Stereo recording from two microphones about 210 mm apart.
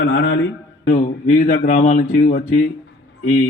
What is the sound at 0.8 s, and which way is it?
Speech, 35° left (ahead or behind).